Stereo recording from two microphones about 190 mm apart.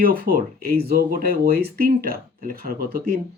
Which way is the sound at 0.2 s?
50° right (ahead or behind).